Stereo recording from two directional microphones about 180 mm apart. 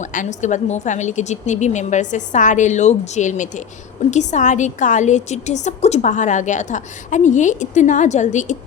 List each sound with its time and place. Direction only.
0.0 s a woman's voice: 45° left (ahead or behind)